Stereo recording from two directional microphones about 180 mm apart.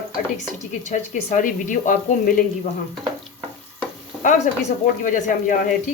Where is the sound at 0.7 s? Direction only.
45° left (ahead or behind).